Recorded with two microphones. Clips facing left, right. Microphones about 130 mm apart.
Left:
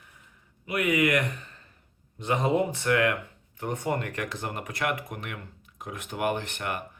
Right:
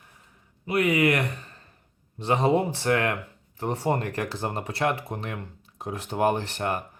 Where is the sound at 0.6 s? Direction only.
35° right (ahead or behind).